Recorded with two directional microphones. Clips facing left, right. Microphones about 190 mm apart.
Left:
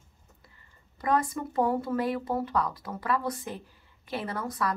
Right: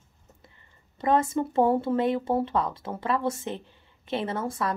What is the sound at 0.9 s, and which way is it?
Speech, 25° right (ahead or behind).